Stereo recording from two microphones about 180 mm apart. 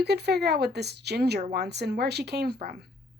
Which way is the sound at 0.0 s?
65° right (ahead or behind).